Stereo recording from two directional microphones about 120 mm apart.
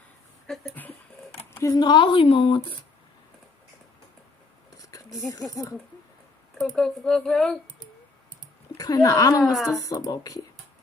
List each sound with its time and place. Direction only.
0.5 s a sound: 5° left (ahead or behind)
1.4 s a sound: 20° left (ahead or behind)
1.7 s speech: 40° left (ahead or behind)
4.7 s a sound: 30° left (ahead or behind)
5.5 s a woman's voice: 25° left (ahead or behind)
6.5 s speech: 5° left (ahead or behind)
8.7 s speech: 30° left (ahead or behind)
9.4 s speech: centre (ahead or behind)
9.7 s a woman's voice: 30° left (ahead or behind)